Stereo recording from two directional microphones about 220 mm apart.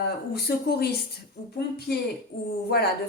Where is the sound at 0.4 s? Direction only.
45° left (ahead or behind).